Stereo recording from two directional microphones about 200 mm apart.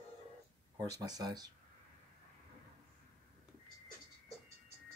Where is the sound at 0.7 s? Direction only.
20° right (ahead or behind).